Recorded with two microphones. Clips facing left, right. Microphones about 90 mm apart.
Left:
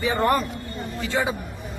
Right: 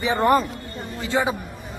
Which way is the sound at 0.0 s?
20° right (ahead or behind).